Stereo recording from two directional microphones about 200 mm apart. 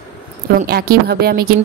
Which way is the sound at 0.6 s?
50° right (ahead or behind).